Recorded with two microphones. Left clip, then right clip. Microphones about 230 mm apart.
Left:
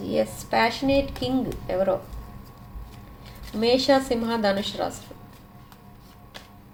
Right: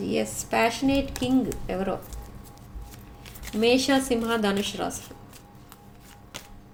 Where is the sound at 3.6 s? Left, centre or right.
Right.